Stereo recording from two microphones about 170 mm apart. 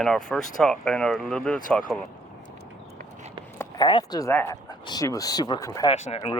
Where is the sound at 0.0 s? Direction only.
5° left (ahead or behind).